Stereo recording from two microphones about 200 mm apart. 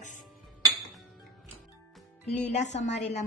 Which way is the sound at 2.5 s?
35° left (ahead or behind).